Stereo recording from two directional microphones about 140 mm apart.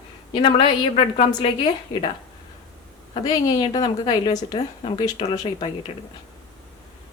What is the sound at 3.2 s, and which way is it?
A woman's voice, 30° left (ahead or behind).